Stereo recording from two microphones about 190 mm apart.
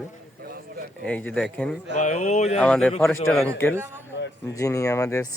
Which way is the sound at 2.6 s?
5° left (ahead or behind).